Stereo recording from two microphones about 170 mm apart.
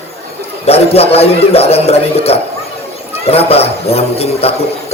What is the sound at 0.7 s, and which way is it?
Speech, 35° left (ahead or behind).